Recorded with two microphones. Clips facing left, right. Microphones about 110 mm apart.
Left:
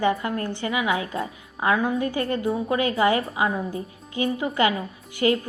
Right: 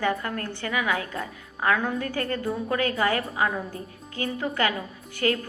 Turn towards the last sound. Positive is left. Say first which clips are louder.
# left 4 dB
turn(degrees=20)  # may be behind; listen again after turning